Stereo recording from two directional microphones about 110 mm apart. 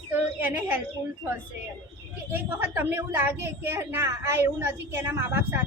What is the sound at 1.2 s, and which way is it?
A woman's voice, 20° right (ahead or behind).